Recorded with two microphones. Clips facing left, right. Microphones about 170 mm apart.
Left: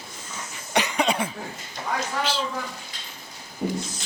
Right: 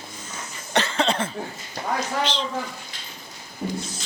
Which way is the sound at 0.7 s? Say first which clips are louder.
Right 1 dB; 15° left (ahead or behind).